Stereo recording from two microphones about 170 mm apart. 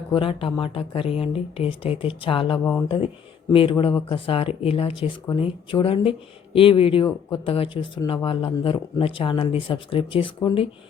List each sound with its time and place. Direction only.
0.1 s speech: 30° left (ahead or behind)